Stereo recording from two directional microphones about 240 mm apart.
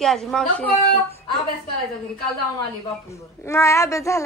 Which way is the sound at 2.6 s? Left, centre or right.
Centre.